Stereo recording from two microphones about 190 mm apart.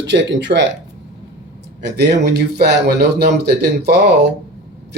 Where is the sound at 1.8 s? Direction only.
60° right (ahead or behind).